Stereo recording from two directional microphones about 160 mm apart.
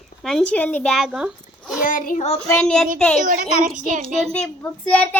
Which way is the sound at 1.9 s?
60° left (ahead or behind).